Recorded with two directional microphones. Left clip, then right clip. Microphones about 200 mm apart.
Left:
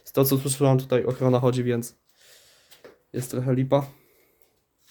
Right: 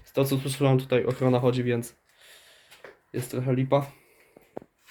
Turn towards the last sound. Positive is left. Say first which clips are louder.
# left 2 dB
turn(degrees=25)  # may be behind; listen again after turning